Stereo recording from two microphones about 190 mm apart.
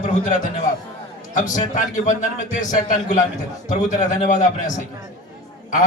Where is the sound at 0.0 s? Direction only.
40° left (ahead or behind).